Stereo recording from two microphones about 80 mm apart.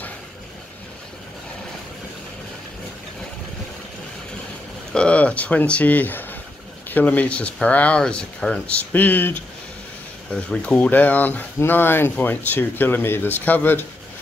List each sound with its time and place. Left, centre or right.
4.9 s speech: centre
10.3 s speech: centre